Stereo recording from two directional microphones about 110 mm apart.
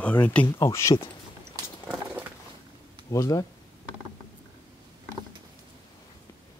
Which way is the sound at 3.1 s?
30° left (ahead or behind).